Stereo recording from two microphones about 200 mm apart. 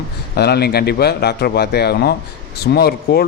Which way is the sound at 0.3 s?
55° left (ahead or behind).